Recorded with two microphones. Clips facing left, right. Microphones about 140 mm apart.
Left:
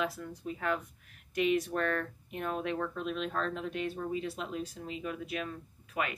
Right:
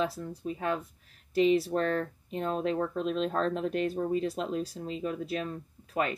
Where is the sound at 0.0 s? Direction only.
35° right (ahead or behind).